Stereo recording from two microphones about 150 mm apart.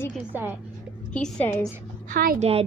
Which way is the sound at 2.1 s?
75° right (ahead or behind).